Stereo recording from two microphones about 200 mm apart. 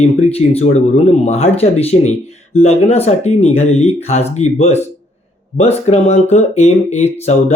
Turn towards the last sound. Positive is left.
turn(degrees=35)  # may be behind; listen again after turning